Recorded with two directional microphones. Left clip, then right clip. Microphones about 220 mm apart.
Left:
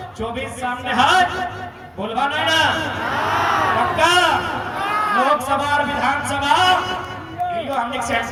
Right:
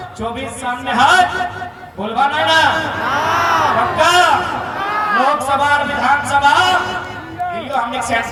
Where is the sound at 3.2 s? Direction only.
30° right (ahead or behind).